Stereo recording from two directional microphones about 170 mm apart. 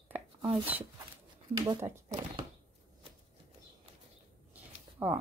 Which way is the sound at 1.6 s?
25° right (ahead or behind).